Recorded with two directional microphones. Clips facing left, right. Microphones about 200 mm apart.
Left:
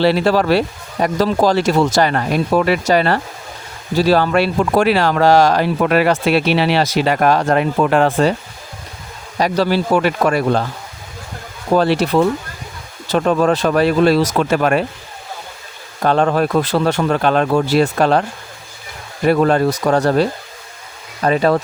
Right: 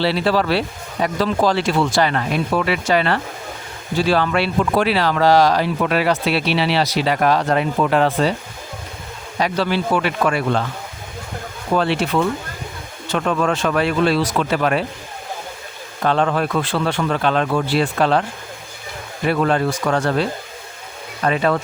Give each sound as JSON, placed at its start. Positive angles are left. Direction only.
{"t": 0.0, "sound": "speech", "side_deg": 45}
{"t": 9.4, "sound": "speech", "side_deg": 40}
{"t": 11.7, "sound": "speech", "side_deg": 40}
{"t": 16.0, "sound": "speech", "side_deg": 40}